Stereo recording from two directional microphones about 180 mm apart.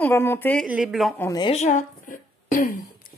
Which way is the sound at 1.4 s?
40° left (ahead or behind).